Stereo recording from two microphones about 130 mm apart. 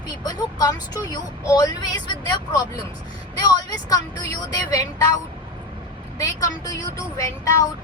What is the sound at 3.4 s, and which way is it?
Speech, 30° left (ahead or behind).